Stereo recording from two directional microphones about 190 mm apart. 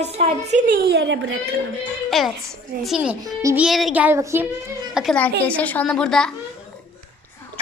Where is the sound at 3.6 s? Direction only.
Centre (ahead or behind).